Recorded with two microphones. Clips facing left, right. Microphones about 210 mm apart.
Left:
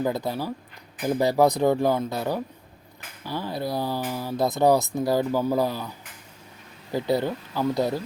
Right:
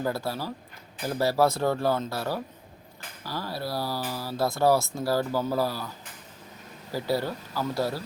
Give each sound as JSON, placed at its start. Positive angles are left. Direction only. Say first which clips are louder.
{"t": 0.0, "sound": "speech", "louder": "left 3 dB", "side_deg": 20}
{"t": 6.9, "sound": "speech", "louder": "left 4 dB", "side_deg": 20}